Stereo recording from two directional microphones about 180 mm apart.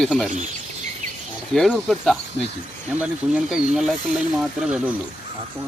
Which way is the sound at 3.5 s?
Centre (ahead or behind).